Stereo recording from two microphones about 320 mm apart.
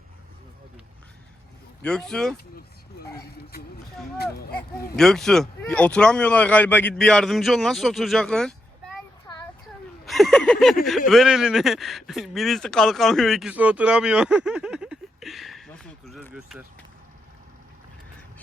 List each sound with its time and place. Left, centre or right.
1.8 s speech: centre
4.2 s speech: left
4.9 s speech: centre
10.1 s a sound: centre
10.8 s speech: centre